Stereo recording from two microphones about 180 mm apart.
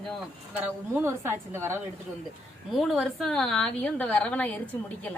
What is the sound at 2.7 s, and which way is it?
A woman's voice, centre (ahead or behind).